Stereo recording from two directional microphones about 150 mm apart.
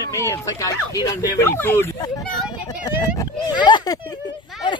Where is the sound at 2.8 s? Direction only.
25° left (ahead or behind).